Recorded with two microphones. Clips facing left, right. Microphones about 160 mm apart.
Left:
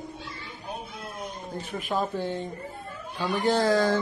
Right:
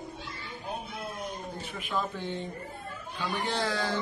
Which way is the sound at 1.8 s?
40° left (ahead or behind).